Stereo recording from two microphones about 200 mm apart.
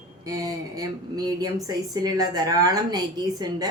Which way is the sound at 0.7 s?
20° right (ahead or behind).